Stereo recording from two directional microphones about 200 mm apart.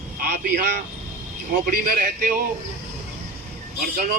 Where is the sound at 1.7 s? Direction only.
45° right (ahead or behind).